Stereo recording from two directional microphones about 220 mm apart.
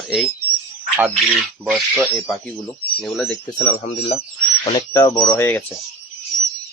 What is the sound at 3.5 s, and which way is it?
Speech, 25° left (ahead or behind).